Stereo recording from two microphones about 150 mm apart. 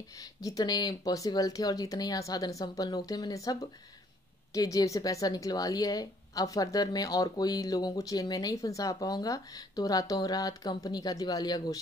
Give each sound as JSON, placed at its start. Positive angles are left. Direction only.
{"t": 0.4, "sound": "a woman's voice", "side_deg": 25}
{"t": 4.6, "sound": "a woman's voice", "side_deg": 20}